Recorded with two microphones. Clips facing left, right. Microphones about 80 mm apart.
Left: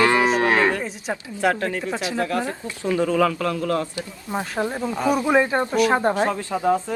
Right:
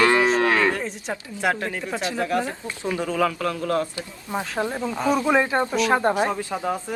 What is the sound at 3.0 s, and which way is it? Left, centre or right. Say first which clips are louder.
Speech: left 3 dB; left.